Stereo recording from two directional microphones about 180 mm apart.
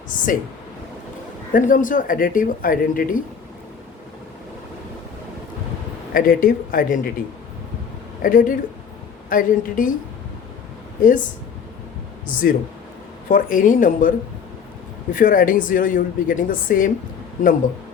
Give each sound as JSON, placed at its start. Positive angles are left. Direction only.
{"t": 0.1, "sound": "speech", "side_deg": 45}
{"t": 1.5, "sound": "speech", "side_deg": 50}
{"t": 6.1, "sound": "speech", "side_deg": 50}
{"t": 8.2, "sound": "speech", "side_deg": 50}
{"t": 11.0, "sound": "speech", "side_deg": 45}
{"t": 12.3, "sound": "speech", "side_deg": 50}
{"t": 15.1, "sound": "speech", "side_deg": 50}